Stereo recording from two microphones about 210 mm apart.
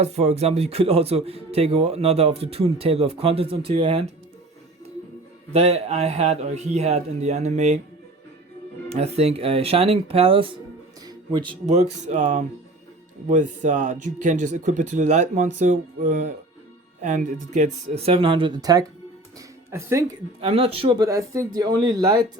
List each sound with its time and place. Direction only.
0.0 s speech: 30° right (ahead or behind)
5.5 s speech: 30° right (ahead or behind)
8.9 s speech: 30° right (ahead or behind); by 20.1 s 15° right (ahead or behind)
20.4 s speech: 30° right (ahead or behind)